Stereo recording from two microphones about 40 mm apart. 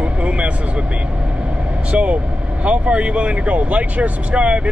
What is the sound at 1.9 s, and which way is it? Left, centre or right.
Speech, right.